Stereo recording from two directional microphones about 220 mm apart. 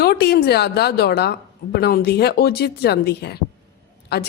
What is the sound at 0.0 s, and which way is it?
A woman's voice, 45° left (ahead or behind).